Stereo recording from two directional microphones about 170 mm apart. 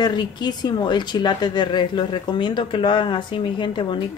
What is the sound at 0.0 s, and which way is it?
Speech, 25° left (ahead or behind).